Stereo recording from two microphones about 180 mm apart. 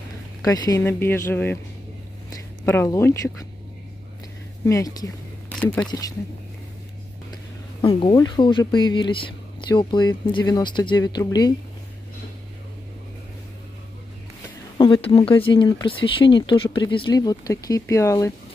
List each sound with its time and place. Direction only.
0.4 s speech: 20° left (ahead or behind)
2.6 s speech: 15° left (ahead or behind)
4.6 s speech: 20° left (ahead or behind)
5.5 s a sound: 5° left (ahead or behind)
5.9 s speech: 20° left (ahead or behind)
7.8 s speech: 30° left (ahead or behind)
14.8 s speech: 30° left (ahead or behind)